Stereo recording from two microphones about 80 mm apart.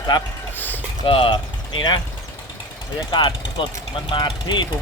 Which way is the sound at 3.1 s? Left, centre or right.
Left.